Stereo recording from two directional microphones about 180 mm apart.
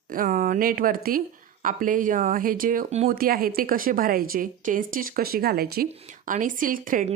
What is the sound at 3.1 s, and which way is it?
Speech, 55° right (ahead or behind).